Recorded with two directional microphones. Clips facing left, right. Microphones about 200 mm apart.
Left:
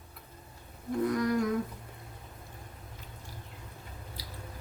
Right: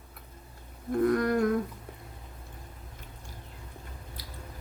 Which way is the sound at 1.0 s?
55° right (ahead or behind).